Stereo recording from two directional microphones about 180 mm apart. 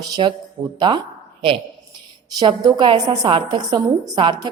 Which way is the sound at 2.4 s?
20° right (ahead or behind).